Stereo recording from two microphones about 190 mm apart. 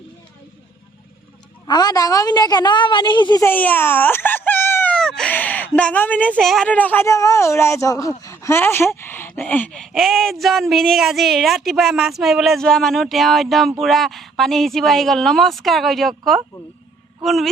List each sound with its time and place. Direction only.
1.6 s a woman's voice: 20° left (ahead or behind)
3.4 s speech: 10° left (ahead or behind)